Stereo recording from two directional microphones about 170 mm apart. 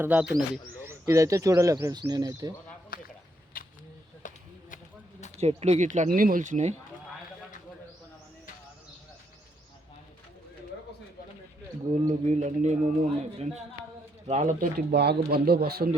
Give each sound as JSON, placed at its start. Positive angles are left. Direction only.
{"t": 0.0, "sound": "a man's voice", "side_deg": -10}
{"t": 2.9, "sound": "speech", "side_deg": 60}
{"t": 4.2, "sound": "a sound", "side_deg": 50}
{"t": 5.4, "sound": "speech", "side_deg": -40}
{"t": 12.0, "sound": "speech", "side_deg": -40}
{"t": 14.6, "sound": "speech", "side_deg": -65}